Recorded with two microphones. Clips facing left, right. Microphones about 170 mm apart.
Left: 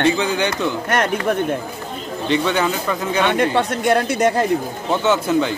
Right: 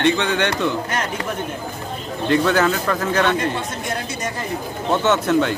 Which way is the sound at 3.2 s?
70° left (ahead or behind).